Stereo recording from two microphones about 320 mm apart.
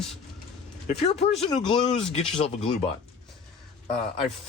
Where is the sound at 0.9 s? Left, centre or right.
Centre.